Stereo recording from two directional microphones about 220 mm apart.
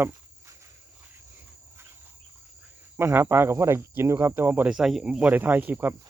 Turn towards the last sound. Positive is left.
turn(degrees=-10)  # may be behind; listen again after turning